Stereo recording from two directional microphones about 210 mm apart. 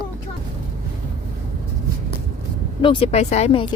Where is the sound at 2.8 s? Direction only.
25° left (ahead or behind).